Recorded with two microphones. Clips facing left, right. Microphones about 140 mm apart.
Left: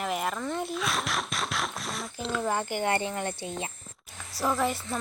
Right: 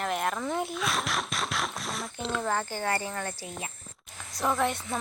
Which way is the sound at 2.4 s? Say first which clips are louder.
Left 3 dB; 10° left (ahead or behind).